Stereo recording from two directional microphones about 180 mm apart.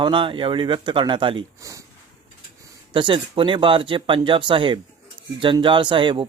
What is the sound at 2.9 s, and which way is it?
Speech, 25° right (ahead or behind).